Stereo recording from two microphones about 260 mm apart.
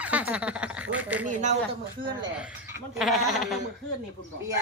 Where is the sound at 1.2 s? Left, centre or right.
Right.